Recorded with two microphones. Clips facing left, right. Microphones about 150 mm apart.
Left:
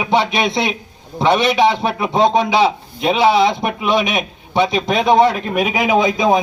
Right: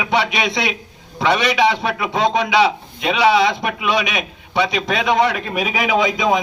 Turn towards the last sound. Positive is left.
turn(degrees=30)  # may be behind; listen again after turning